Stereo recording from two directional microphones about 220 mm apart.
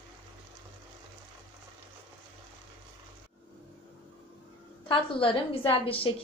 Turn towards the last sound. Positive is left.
turn(degrees=25)  # may be behind; listen again after turning